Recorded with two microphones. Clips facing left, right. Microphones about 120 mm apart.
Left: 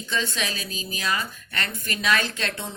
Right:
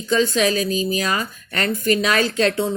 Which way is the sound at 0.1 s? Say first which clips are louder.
Right 11 dB; 45° right (ahead or behind).